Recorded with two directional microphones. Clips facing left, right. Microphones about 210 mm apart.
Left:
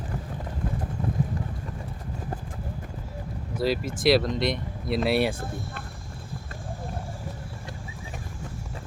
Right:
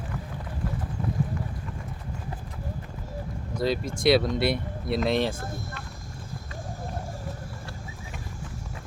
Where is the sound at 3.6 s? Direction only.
5° left (ahead or behind).